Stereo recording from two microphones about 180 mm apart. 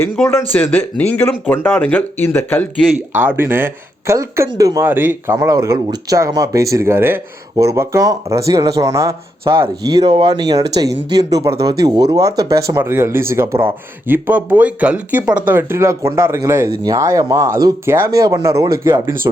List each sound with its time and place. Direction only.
0.0 s speech: 15° left (ahead or behind)
2.8 s speech: 10° right (ahead or behind)